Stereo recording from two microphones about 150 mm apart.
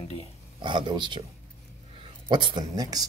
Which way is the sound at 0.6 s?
30° right (ahead or behind).